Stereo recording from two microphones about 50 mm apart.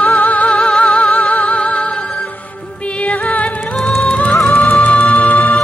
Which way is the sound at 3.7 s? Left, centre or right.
Centre.